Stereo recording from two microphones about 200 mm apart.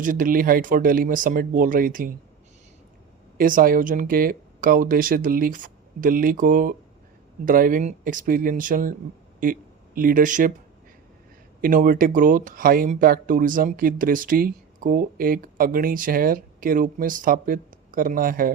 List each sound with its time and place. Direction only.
0.0 s speech: 45° right (ahead or behind)
3.3 s speech: 45° right (ahead or behind)
11.6 s speech: 45° right (ahead or behind)